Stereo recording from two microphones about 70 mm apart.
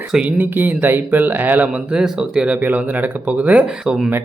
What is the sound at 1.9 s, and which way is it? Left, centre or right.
Speech, centre.